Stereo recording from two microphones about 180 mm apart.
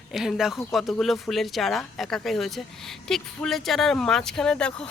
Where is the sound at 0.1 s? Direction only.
Centre (ahead or behind).